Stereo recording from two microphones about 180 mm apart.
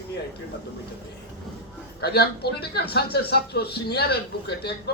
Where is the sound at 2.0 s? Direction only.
65° left (ahead or behind).